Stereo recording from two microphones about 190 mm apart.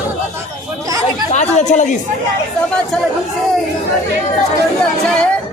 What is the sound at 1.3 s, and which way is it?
Speech, 35° left (ahead or behind).